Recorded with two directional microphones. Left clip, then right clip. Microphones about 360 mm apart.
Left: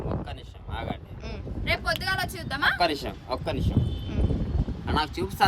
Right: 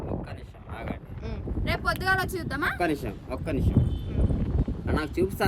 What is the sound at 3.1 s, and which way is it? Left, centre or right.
Speech, centre.